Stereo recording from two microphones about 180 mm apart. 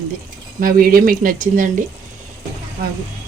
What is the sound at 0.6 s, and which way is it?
A man's voice, 55° right (ahead or behind).